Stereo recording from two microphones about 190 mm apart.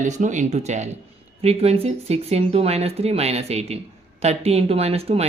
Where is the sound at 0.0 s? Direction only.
40° right (ahead or behind).